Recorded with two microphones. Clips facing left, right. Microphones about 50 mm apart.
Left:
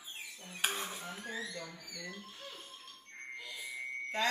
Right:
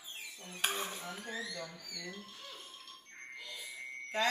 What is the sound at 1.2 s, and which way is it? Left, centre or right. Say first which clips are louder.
Speech: left 1 dB; centre.